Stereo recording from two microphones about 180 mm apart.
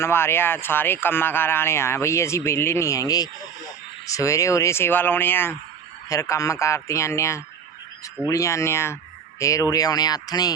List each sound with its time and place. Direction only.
0.0 s speech: 15° left (ahead or behind)